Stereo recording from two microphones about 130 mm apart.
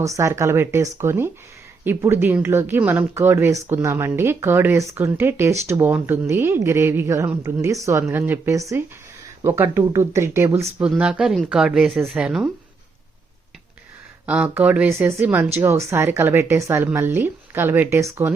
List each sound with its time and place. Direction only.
0.0 s speech: 25° right (ahead or behind)
10.8 s speech: 10° right (ahead or behind)
14.3 s speech: 10° right (ahead or behind)